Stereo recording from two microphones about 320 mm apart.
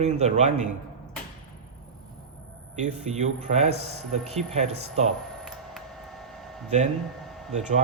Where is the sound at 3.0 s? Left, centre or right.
Right.